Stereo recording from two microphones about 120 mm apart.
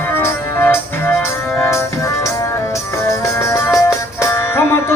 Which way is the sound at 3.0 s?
25° left (ahead or behind).